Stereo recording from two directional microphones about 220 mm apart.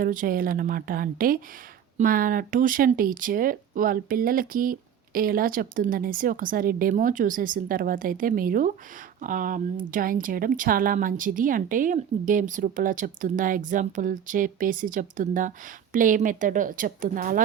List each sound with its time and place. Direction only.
0.0 s speech: 40° right (ahead or behind)